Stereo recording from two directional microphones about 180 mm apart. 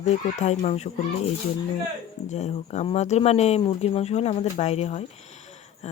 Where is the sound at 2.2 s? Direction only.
40° left (ahead or behind).